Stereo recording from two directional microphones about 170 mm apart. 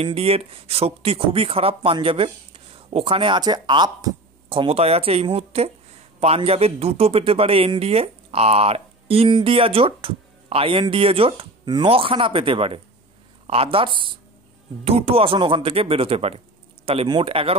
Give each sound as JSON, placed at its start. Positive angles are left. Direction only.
{"t": 0.0, "sound": "a man's voice", "side_deg": -35}